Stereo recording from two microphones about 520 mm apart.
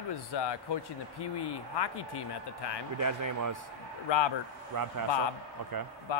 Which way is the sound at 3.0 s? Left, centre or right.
Right.